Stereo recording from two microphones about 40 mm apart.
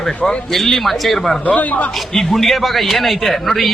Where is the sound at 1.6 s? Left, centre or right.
Left.